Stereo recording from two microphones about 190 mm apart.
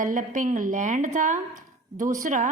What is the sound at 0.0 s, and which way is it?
A woman's voice, 45° right (ahead or behind).